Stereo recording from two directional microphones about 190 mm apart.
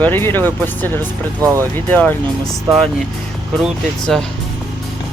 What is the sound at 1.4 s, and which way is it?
Speech, 15° right (ahead or behind).